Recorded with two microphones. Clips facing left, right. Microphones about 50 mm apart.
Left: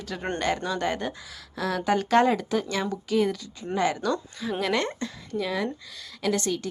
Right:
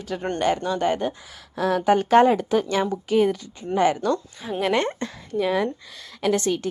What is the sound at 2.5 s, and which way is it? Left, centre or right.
A woman's voice, right.